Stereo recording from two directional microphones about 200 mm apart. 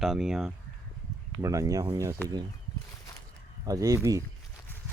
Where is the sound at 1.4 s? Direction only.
15° right (ahead or behind).